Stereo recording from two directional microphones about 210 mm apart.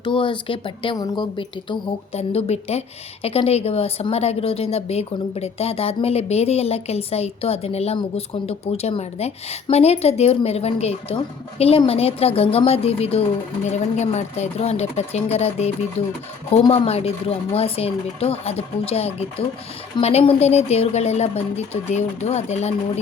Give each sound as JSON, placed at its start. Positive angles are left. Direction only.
{"t": 0.0, "sound": "a woman's voice", "side_deg": 25}